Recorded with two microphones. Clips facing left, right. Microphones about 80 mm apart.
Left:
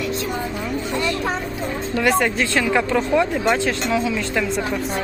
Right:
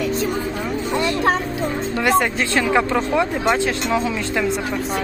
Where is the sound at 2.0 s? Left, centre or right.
Centre.